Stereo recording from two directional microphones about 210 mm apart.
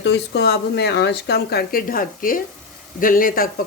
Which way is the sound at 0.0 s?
55° left (ahead or behind).